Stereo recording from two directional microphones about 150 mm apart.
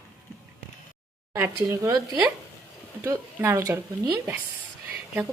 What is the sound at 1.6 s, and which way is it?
Speech, 25° right (ahead or behind).